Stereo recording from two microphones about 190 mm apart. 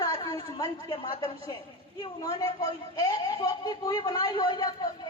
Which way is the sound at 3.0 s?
20° left (ahead or behind).